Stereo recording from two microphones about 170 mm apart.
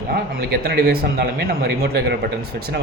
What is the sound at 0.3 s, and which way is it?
A man's voice, 65° right (ahead or behind).